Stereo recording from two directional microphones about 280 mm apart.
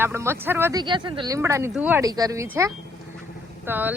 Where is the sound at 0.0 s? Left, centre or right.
Centre.